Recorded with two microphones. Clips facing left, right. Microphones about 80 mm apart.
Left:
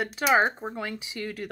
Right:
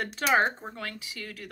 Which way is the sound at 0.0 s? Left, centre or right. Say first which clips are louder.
Left 2 dB; centre.